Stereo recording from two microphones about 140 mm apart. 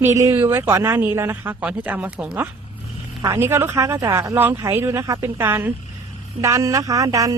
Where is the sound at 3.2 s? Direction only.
20° right (ahead or behind).